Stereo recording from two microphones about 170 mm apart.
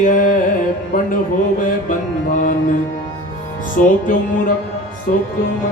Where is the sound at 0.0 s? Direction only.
50° left (ahead or behind).